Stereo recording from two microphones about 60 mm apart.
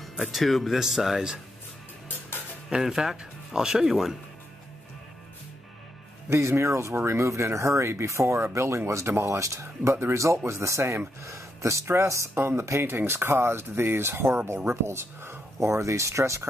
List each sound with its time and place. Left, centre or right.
0.3 s speech: centre
2.7 s speech: centre
6.2 s speech: right
12.8 s speech: right